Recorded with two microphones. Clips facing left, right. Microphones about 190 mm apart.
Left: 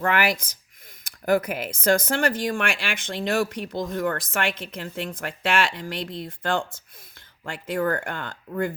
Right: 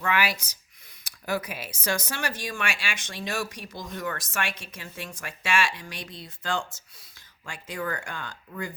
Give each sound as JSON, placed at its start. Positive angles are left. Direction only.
{"t": 0.0, "sound": "speech", "side_deg": 50}